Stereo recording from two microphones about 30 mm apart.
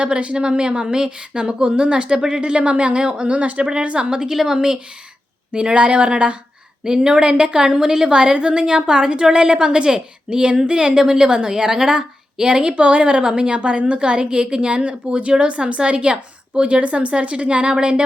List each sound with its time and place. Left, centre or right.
0.0 s a woman's voice: right
2.4 s a woman's voice: right
3.7 s a woman's voice: right
4.4 s a woman's voice: right
5.5 s a woman's voice: right
6.8 s a woman's voice: right